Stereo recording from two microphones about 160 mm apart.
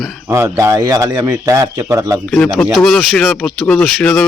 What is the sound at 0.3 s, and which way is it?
A man's voice, 20° right (ahead or behind).